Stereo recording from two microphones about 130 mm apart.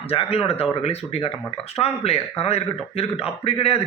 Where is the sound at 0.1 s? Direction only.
45° left (ahead or behind).